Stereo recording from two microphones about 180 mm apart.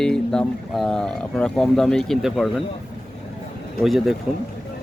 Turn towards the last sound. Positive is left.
turn(degrees=0)  # may be behind; listen again after turning